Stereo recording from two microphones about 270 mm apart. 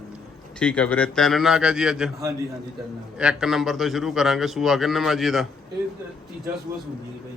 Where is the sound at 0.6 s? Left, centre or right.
Centre.